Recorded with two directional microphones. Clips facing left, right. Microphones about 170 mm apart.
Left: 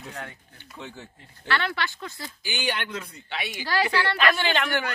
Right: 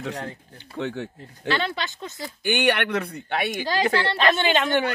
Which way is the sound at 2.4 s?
65° right (ahead or behind).